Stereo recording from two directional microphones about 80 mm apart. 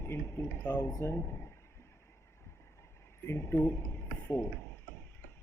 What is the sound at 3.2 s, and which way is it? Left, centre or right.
Speech, left.